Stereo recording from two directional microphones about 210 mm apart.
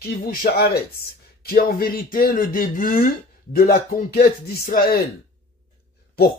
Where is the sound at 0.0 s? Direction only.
45° left (ahead or behind).